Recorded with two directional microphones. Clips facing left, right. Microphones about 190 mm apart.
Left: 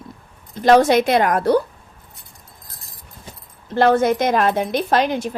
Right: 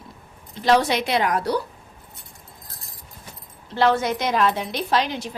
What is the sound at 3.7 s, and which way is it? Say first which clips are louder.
A woman's voice: left 5 dB; 50° left (ahead or behind).